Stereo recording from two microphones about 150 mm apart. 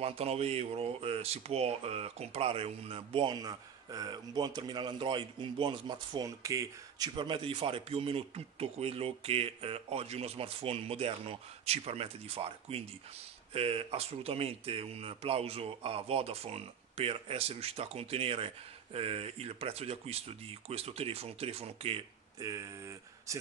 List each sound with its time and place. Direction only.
0.0 s speech: 45° right (ahead or behind); by 7.1 s 20° right (ahead or behind)
7.2 s speech: 35° right (ahead or behind)
22.4 s speech: 20° right (ahead or behind)